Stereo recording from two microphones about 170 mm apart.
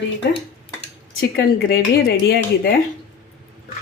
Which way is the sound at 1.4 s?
70° left (ahead or behind).